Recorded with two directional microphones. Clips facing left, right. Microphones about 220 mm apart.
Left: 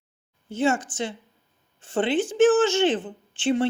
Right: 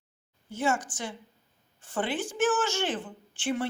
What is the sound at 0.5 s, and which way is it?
A woman's voice, 25° left (ahead or behind).